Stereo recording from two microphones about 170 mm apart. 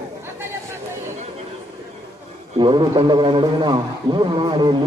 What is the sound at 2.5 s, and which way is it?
A man's voice, 25° right (ahead or behind).